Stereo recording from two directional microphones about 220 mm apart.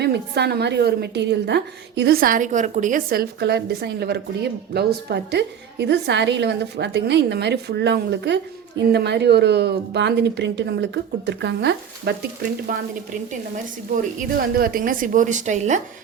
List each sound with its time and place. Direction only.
0.0 s a woman's voice: 50° right (ahead or behind)
12.7 s a woman's voice: 40° right (ahead or behind)
13.9 s a woman's voice: 40° right (ahead or behind)